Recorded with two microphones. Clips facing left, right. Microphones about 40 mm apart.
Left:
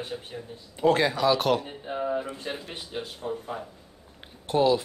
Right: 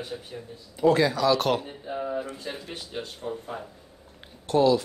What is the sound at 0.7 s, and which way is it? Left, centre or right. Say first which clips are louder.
Speech: right 1 dB; left.